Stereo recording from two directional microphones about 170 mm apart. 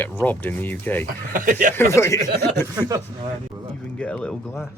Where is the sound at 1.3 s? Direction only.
50° right (ahead or behind).